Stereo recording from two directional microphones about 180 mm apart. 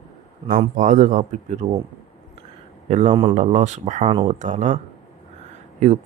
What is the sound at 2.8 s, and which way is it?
Speech, 40° right (ahead or behind).